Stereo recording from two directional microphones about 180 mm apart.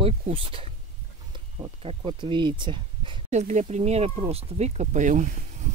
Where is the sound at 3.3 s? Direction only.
40° right (ahead or behind).